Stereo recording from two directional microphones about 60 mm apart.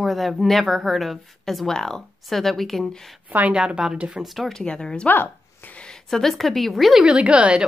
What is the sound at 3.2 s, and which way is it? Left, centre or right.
Speech, right.